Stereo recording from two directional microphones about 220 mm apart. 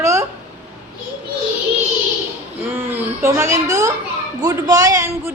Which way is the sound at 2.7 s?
10° right (ahead or behind).